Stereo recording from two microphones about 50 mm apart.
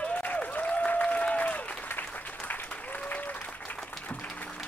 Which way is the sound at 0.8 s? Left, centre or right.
Left.